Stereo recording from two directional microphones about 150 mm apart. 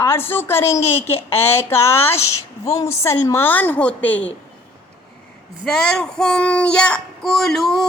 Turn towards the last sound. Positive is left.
turn(degrees=0)  # may be behind; listen again after turning